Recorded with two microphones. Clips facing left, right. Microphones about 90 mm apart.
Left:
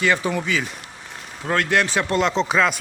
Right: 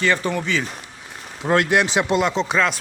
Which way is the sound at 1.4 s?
15° right (ahead or behind).